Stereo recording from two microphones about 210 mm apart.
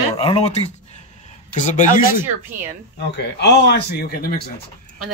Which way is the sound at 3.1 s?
55° left (ahead or behind).